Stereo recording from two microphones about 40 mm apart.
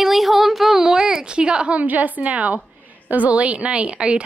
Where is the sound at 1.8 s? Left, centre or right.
Right.